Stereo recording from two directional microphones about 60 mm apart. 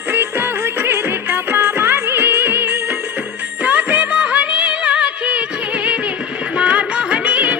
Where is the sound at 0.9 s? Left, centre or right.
Right.